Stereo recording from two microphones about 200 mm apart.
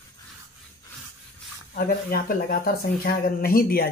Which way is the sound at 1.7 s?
45° left (ahead or behind).